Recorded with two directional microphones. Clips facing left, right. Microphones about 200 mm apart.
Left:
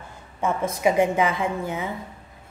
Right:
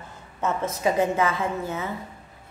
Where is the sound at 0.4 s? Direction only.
15° left (ahead or behind).